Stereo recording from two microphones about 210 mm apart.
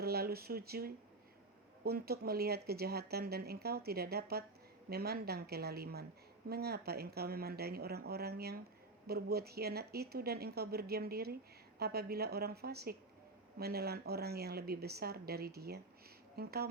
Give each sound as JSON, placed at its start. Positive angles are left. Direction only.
{"t": 0.0, "sound": "speech", "side_deg": -50}